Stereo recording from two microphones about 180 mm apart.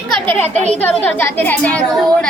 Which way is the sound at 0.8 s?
10° left (ahead or behind).